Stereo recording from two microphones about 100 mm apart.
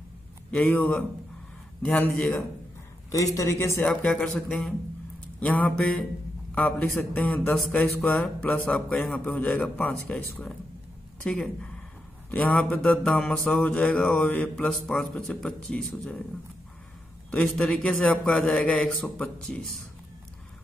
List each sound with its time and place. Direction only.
0.5 s a man's voice: 15° left (ahead or behind)
3.3 s speech: 30° left (ahead or behind)
3.8 s a man's voice: 10° left (ahead or behind)
5.4 s a man's voice: 15° left (ahead or behind)
7.8 s a man's voice: 5° left (ahead or behind)
17.3 s a man's voice: 10° left (ahead or behind)